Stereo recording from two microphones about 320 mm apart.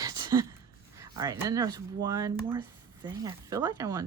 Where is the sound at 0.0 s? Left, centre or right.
Centre.